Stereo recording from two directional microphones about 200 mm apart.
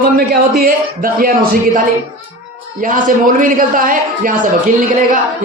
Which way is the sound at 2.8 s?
40° right (ahead or behind).